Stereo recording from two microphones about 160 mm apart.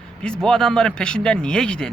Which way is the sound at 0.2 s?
5° left (ahead or behind).